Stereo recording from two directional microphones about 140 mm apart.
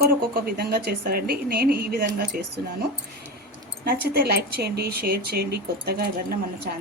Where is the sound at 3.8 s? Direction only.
90° right.